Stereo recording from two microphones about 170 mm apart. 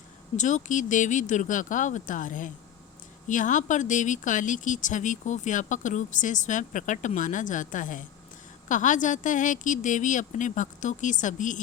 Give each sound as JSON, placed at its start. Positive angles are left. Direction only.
{"t": 0.3, "sound": "speech", "side_deg": 45}